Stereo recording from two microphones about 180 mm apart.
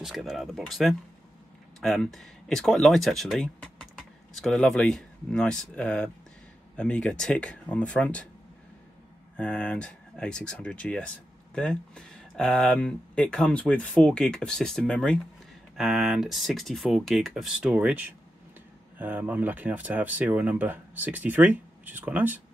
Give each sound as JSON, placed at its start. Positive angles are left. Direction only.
{"t": 0.0, "sound": "speech", "side_deg": 0}
{"t": 9.4, "sound": "speech", "side_deg": 5}